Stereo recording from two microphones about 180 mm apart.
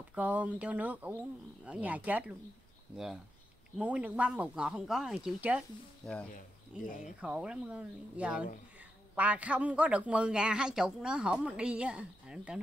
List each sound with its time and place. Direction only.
0.1 s speech: 10° right (ahead or behind)
3.7 s a man's voice: 10° right (ahead or behind)
6.3 s speech: 50° left (ahead or behind)
7.2 s a man's voice: 5° right (ahead or behind)